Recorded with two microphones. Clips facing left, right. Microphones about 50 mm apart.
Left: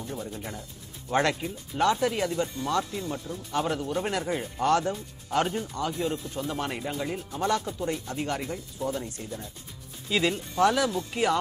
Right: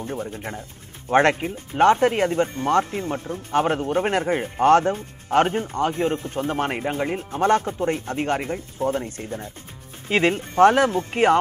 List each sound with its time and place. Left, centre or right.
0.0 s speech: right